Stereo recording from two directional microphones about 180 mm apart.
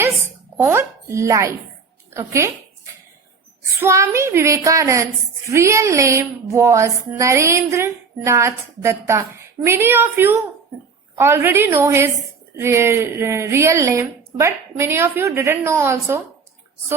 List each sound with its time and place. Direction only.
0.5 s speech: 10° right (ahead or behind)
3.8 s speech: 15° right (ahead or behind)